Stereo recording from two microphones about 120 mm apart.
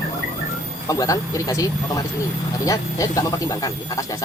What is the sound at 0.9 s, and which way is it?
Speech, 30° left (ahead or behind).